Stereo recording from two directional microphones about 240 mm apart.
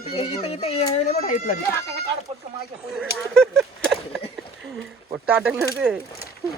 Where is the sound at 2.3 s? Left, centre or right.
Right.